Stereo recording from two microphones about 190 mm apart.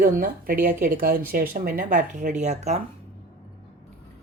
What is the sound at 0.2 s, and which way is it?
Speech, 50° right (ahead or behind).